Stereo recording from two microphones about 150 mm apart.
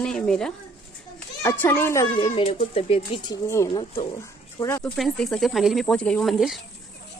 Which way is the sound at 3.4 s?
20° left (ahead or behind).